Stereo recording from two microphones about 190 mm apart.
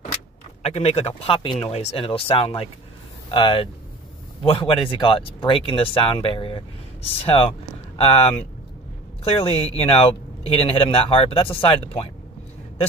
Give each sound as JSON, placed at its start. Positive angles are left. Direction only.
{"t": 0.6, "sound": "a man's voice", "side_deg": 35}